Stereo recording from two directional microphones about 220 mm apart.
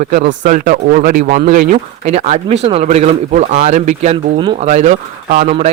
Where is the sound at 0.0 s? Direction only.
35° right (ahead or behind).